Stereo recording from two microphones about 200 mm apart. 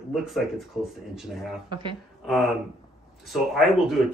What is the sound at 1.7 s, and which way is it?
Speech, 25° right (ahead or behind).